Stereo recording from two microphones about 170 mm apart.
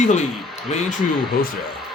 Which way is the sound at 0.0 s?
45° left (ahead or behind).